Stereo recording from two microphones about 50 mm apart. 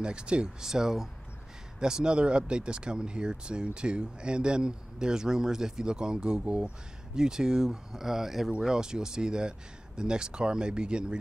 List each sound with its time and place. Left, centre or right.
0.0 s speech: centre